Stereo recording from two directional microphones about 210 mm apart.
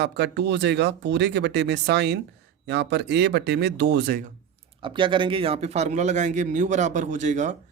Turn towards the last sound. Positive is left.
turn(degrees=-35)  # may be behind; listen again after turning